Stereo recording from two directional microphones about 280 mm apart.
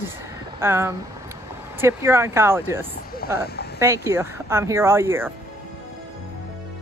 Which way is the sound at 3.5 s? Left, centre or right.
Left.